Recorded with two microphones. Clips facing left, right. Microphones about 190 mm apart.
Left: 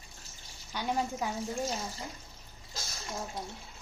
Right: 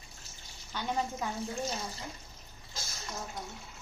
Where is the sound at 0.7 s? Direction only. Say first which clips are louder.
Left 1 dB; 10° left (ahead or behind).